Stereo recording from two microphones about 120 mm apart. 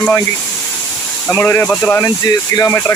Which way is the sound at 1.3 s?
15° left (ahead or behind).